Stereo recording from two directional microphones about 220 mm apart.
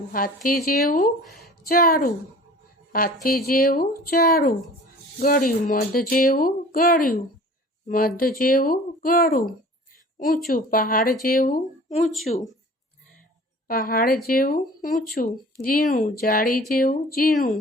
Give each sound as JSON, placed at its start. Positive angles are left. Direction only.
{"t": 0.1, "sound": "speech", "side_deg": 40}
{"t": 1.2, "sound": "a woman's voice", "side_deg": 0}
{"t": 1.5, "sound": "a woman's voice", "side_deg": 45}
{"t": 3.2, "sound": "speech", "side_deg": 45}
{"t": 13.7, "sound": "speech", "side_deg": 40}